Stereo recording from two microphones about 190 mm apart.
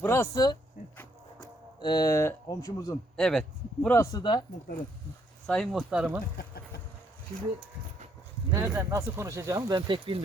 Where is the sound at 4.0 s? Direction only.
20° left (ahead or behind).